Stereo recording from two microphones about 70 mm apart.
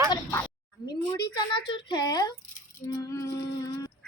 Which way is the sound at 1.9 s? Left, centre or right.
Left.